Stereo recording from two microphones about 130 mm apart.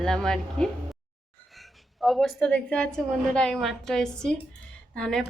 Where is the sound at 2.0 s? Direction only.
Centre (ahead or behind).